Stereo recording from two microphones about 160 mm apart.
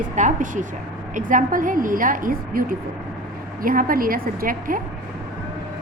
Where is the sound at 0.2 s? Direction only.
55° right (ahead or behind).